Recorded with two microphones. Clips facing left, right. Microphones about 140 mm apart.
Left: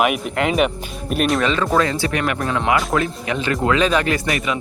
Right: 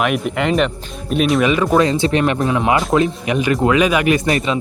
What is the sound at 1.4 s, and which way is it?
Speech, 10° right (ahead or behind).